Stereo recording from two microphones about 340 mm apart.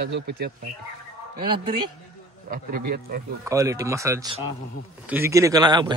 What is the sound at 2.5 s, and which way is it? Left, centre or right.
Speech, right.